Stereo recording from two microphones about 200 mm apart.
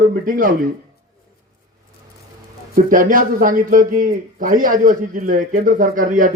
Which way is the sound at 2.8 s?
45° right (ahead or behind).